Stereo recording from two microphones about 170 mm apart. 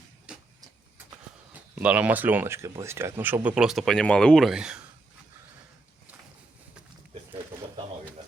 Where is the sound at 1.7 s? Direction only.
10° right (ahead or behind).